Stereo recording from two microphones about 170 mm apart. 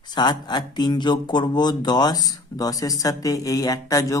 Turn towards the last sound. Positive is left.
turn(degrees=20)  # may be behind; listen again after turning